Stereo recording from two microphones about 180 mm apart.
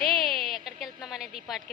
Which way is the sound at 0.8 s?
Centre (ahead or behind).